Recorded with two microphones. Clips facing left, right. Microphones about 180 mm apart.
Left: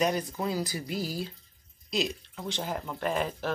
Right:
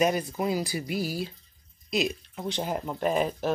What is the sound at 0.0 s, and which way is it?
Speech, 10° right (ahead or behind).